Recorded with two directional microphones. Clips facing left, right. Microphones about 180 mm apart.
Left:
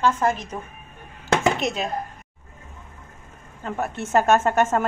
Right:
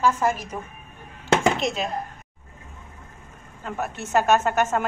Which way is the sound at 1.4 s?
Centre (ahead or behind).